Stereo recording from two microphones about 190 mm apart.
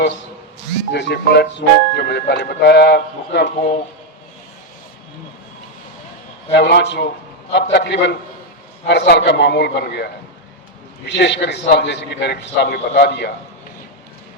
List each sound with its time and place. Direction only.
0.9 s speech: 65° left (ahead or behind)
6.5 s speech: 65° left (ahead or behind)
11.1 s speech: 65° left (ahead or behind)